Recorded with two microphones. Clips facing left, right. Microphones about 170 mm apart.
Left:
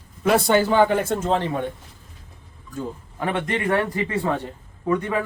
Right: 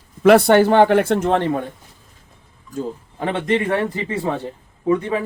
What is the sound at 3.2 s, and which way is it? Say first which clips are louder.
Speech: right 4 dB; 25° right (ahead or behind).